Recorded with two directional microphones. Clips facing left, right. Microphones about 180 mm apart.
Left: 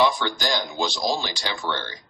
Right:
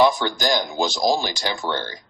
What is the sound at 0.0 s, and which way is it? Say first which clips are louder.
Speech: right 4 dB; 45° right (ahead or behind).